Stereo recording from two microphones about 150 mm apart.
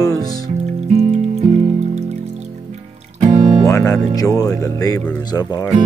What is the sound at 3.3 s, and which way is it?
Music, 30° right (ahead or behind).